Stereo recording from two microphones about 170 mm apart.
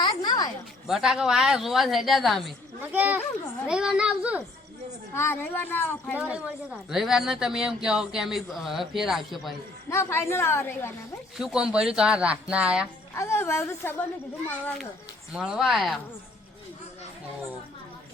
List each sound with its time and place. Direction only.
0.0 s a sound: 25° left (ahead or behind)
0.9 s a man's voice: 5° right (ahead or behind)
2.8 s speech: 10° right (ahead or behind)
5.1 s speech: 15° left (ahead or behind)
6.1 s a man's voice: 10° right (ahead or behind)
9.9 s speech: 15° left (ahead or behind)
11.3 s a man's voice: 5° right (ahead or behind)
13.1 s speech: 15° left (ahead or behind)
15.3 s a man's voice: 5° right (ahead or behind)